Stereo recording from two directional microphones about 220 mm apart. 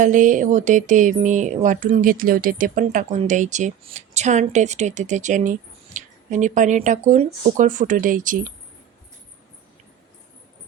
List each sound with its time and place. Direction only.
0.0 s speech: 35° right (ahead or behind)